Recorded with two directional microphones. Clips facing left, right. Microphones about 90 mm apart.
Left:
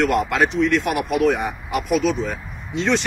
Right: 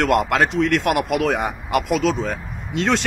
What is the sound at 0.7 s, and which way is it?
Speech, 70° right (ahead or behind).